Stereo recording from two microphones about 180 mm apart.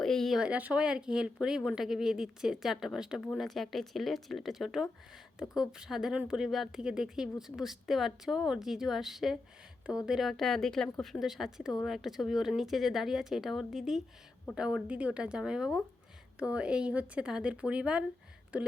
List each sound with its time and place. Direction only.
0.0 s a woman's voice: 5° left (ahead or behind)